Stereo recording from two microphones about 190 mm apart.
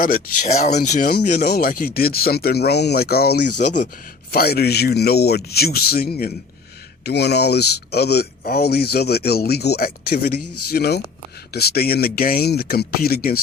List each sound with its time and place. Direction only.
0.0 s speech: 40° left (ahead or behind)
1.4 s speech: 55° left (ahead or behind)
3.6 s speech: 40° left (ahead or behind)
4.3 s speech: 55° left (ahead or behind)